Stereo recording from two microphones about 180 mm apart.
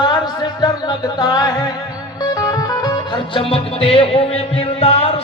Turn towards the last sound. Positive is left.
turn(degrees=35)  # may be behind; listen again after turning